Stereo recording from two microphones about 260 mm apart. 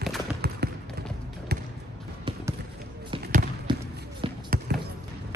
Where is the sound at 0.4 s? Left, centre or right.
Right.